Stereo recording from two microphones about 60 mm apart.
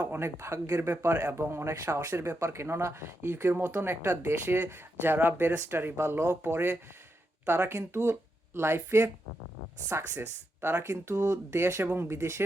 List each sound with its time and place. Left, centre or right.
0.0 s a sound: right
0.3 s speech: right
1.7 s speech: right
2.0 s speech: right
4.4 s speech: right